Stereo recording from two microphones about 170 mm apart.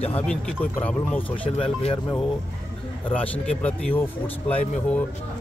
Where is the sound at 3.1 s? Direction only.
10° left (ahead or behind).